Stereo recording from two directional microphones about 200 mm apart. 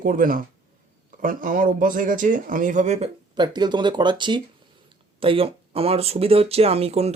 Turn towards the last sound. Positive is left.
turn(degrees=-30)  # may be behind; listen again after turning